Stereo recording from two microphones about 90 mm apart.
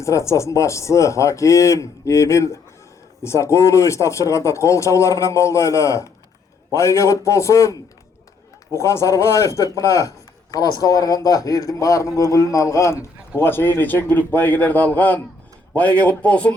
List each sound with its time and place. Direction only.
0.0 s a man's voice: 35° left (ahead or behind); by 16.6 s 15° left (ahead or behind)